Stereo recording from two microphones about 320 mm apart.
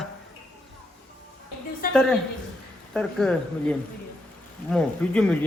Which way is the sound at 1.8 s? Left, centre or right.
Left.